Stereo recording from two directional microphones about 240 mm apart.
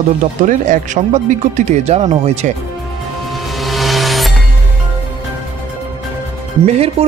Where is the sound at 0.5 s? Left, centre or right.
Right.